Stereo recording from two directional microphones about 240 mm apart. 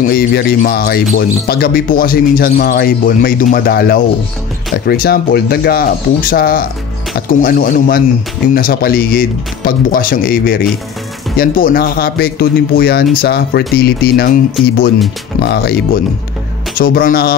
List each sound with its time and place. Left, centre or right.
0.1 s speech: left